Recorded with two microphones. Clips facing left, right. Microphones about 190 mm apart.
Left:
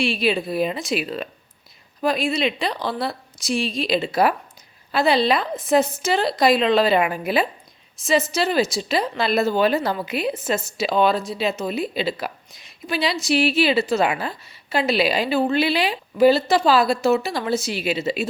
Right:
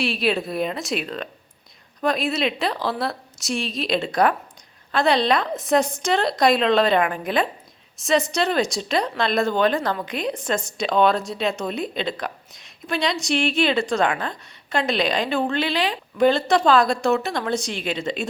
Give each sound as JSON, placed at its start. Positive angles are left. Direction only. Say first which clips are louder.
{"t": 0.0, "sound": "a woman's voice", "louder": "left 1 dB", "side_deg": 0}